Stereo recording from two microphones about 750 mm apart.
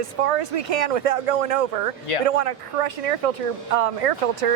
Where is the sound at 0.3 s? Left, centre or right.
Right.